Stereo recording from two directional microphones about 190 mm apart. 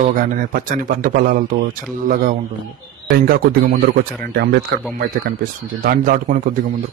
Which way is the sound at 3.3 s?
50° right (ahead or behind).